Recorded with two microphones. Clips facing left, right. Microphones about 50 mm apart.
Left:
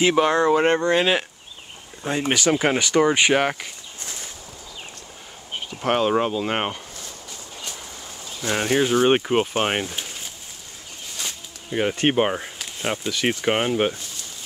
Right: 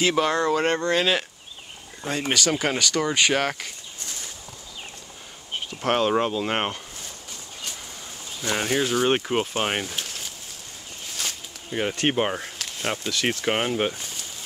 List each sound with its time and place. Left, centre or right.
0.0 s speech: centre
5.7 s speech: centre
8.4 s speech: centre